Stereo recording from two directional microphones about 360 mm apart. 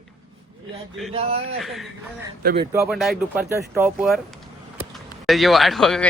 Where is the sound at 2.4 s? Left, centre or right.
Right.